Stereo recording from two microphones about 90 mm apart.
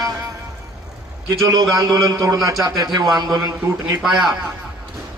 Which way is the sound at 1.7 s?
40° right (ahead or behind).